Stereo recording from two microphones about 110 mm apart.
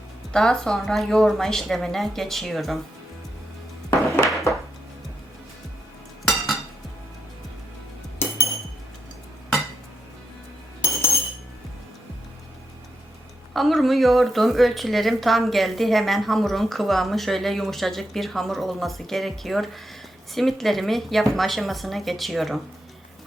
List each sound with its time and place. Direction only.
0.3 s a woman's voice: 5° left (ahead or behind)
3.8 s music: 25° left (ahead or behind)
4.3 s a sound: centre (ahead or behind)
6.2 s chink: centre (ahead or behind)
13.5 s a woman's voice: centre (ahead or behind)